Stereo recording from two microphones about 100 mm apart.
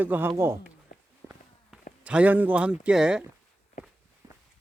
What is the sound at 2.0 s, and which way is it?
A man's voice, 15° right (ahead or behind).